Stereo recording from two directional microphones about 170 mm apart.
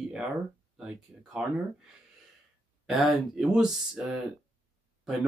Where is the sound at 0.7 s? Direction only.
5° right (ahead or behind).